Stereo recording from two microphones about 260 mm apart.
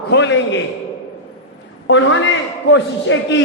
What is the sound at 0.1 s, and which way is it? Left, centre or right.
Speech, left.